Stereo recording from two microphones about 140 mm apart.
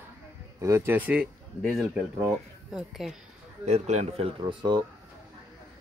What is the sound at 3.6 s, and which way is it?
Speech, 55° right (ahead or behind).